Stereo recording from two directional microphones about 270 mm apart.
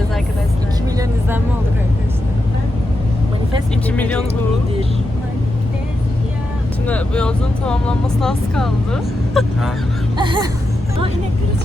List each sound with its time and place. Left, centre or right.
3.9 s speech: centre
6.8 s speech: centre
10.2 s music: centre